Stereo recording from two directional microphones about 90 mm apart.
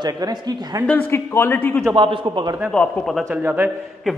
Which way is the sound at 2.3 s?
55° right (ahead or behind).